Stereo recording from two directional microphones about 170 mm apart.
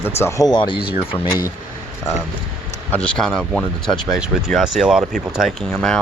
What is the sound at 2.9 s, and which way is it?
Speech, 5° left (ahead or behind).